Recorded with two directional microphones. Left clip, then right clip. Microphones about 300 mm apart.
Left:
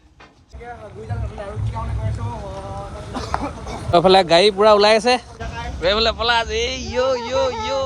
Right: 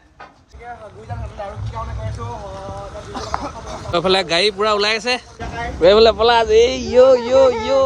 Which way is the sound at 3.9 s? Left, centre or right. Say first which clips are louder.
Left 4 dB; centre.